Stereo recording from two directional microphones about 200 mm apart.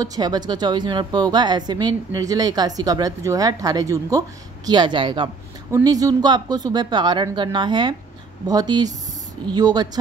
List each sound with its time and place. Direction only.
0.0 s a woman's voice: 20° right (ahead or behind)